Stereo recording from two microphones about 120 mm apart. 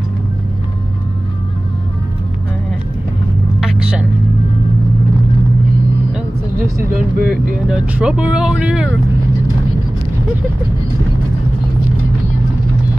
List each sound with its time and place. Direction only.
6.6 s vehicle: 15° right (ahead or behind)
7.6 s speech: 10° right (ahead or behind)